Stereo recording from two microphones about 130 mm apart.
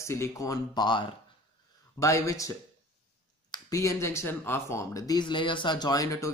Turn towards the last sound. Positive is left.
turn(degrees=25)  # may be behind; listen again after turning